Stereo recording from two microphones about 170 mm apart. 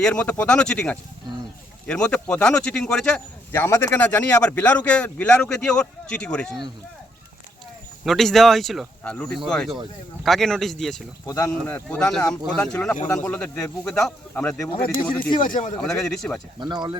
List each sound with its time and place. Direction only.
0.0 s speech: 5° left (ahead or behind)
8.0 s speech: centre (ahead or behind)
11.3 s speech: 20° left (ahead or behind)
15.4 s speech: 50° left (ahead or behind)
16.0 s speech: 5° left (ahead or behind)
16.6 s speech: 25° right (ahead or behind)